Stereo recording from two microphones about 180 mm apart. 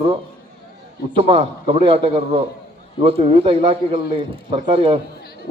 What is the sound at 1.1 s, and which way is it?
A man's voice, 30° right (ahead or behind).